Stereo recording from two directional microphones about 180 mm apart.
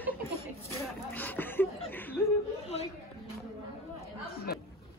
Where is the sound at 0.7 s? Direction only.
10° left (ahead or behind).